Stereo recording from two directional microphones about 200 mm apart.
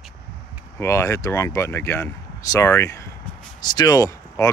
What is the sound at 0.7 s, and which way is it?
Speech, 15° left (ahead or behind).